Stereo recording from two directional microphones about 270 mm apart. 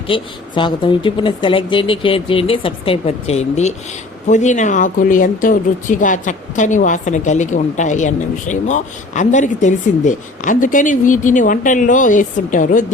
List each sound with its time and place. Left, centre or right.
0.1 s speech: centre